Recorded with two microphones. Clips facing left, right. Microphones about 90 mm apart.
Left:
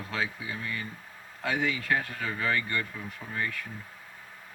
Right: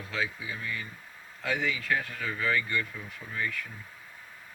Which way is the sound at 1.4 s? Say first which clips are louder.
Left 1 dB; 45° left (ahead or behind).